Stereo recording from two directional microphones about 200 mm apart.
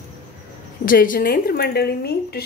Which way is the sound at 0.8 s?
45° left (ahead or behind).